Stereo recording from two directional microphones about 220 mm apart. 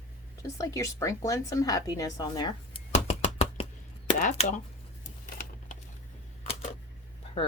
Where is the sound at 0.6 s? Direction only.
15° left (ahead or behind); by 4.4 s 30° left (ahead or behind).